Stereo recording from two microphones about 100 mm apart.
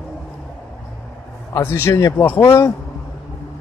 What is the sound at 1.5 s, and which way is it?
Speech, 25° left (ahead or behind).